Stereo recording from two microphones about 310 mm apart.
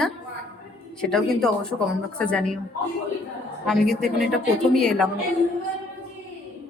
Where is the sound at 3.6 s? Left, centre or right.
Centre.